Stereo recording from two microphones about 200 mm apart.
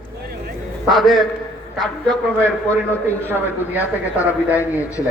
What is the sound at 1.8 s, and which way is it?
A man's voice, 5° left (ahead or behind).